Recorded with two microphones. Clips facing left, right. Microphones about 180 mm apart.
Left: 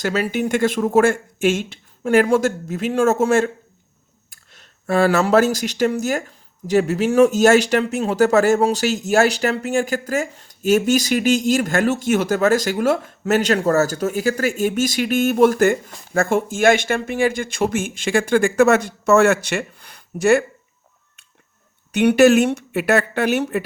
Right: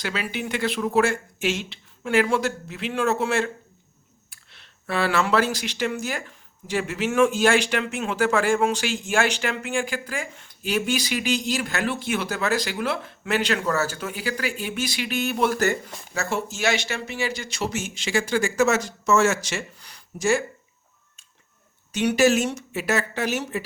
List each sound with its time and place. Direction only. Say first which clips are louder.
0.0 s speech: left 8 dB; 45° left (ahead or behind); by 20.4 s 60° left (ahead or behind)
21.9 s speech: left 7 dB; 60° left (ahead or behind)